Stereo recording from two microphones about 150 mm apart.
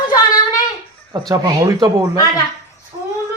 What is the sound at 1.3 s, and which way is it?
Speech, 25° right (ahead or behind).